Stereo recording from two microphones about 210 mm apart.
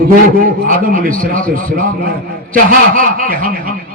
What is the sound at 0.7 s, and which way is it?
A man's voice, 40° right (ahead or behind).